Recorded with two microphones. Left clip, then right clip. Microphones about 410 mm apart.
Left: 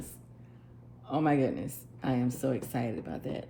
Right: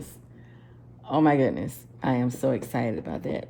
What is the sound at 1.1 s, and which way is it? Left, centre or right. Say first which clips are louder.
Speech: right 7 dB; right.